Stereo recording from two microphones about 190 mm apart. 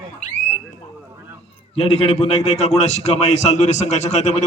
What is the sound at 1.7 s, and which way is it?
A man's voice, 30° left (ahead or behind).